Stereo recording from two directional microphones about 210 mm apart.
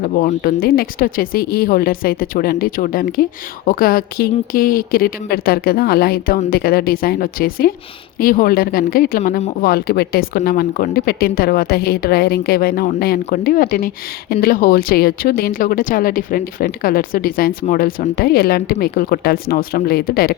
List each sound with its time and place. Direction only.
0.0 s speech: 40° left (ahead or behind)